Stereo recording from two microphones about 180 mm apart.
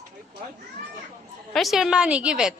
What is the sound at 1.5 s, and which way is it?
Speech, centre (ahead or behind).